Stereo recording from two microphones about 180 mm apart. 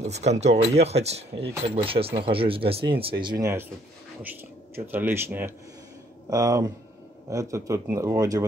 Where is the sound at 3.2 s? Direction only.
15° right (ahead or behind).